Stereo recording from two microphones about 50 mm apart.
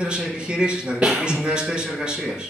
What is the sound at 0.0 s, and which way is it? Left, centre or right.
A man's voice, centre.